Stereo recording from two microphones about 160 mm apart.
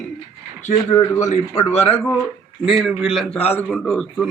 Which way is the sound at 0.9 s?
15° left (ahead or behind).